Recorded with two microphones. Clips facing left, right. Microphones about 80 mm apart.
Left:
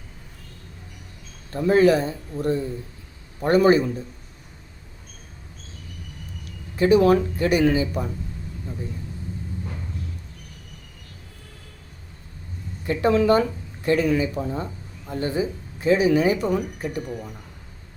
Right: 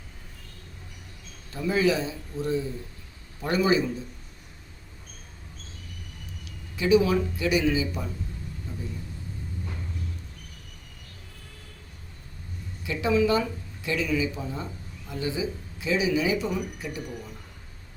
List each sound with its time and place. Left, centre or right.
1.5 s speech: left
6.4 s speech: left
12.8 s speech: left